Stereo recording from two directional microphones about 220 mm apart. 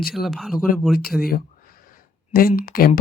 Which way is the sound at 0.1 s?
Centre (ahead or behind).